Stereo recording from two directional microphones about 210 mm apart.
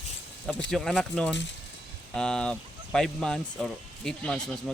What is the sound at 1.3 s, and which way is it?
Speech, 60° left (ahead or behind).